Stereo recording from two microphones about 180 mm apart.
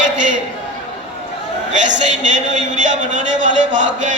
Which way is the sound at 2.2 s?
45° right (ahead or behind).